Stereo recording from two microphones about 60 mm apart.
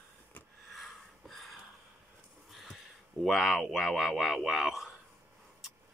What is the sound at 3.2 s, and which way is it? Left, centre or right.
Speech, centre.